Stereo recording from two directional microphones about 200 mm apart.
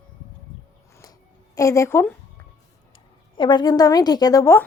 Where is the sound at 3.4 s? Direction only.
20° left (ahead or behind).